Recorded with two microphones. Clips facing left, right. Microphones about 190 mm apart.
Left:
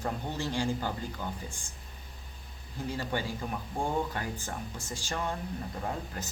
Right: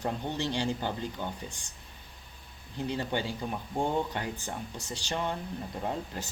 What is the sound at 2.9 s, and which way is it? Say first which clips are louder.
Speech: right 1 dB; 25° right (ahead or behind).